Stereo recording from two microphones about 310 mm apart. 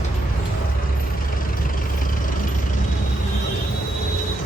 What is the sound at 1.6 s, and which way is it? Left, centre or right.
Vehicle, left.